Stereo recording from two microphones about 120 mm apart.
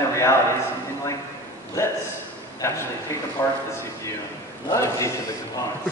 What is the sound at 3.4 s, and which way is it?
Speech, 20° left (ahead or behind).